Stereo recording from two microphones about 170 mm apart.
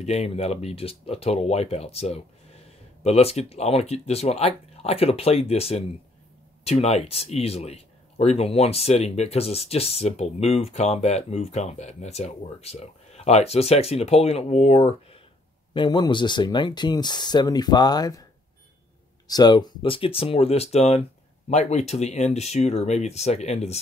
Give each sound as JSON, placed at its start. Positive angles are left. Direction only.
{"t": 0.0, "sound": "speech", "side_deg": 40}
{"t": 15.7, "sound": "speech", "side_deg": 25}
{"t": 19.2, "sound": "speech", "side_deg": 25}